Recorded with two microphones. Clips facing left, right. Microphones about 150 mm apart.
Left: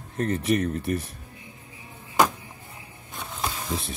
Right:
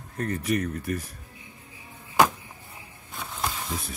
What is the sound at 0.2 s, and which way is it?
Speech, 25° left (ahead or behind).